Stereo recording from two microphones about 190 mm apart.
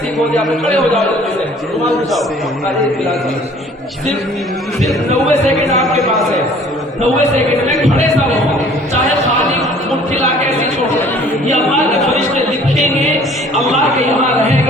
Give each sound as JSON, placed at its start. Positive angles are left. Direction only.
{"t": 5.3, "sound": "speech", "side_deg": -35}
{"t": 5.7, "sound": "speech", "side_deg": 0}
{"t": 13.1, "sound": "music", "side_deg": 0}